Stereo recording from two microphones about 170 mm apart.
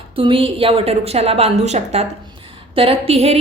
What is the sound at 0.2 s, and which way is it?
A woman's voice, 30° right (ahead or behind).